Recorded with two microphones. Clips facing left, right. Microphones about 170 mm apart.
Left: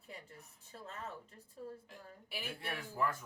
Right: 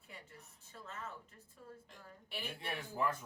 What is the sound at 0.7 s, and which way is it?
Speech, 35° left (ahead or behind).